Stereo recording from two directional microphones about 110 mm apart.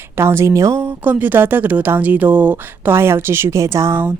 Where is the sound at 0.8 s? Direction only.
15° right (ahead or behind).